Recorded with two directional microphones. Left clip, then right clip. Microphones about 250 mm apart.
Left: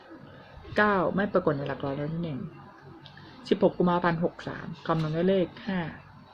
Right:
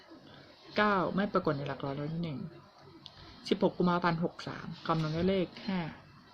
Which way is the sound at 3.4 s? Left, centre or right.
Centre.